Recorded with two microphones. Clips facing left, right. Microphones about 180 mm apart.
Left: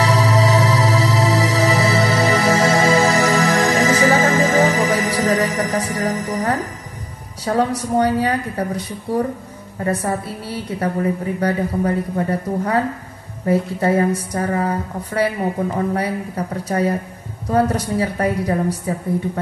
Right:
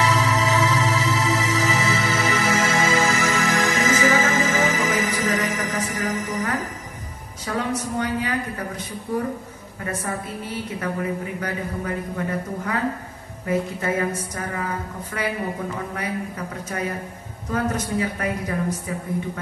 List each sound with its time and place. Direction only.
0.0 s music: 35° left (ahead or behind)
7.4 s a man's voice: 35° left (ahead or behind)
10.8 s a man's voice: 35° left (ahead or behind)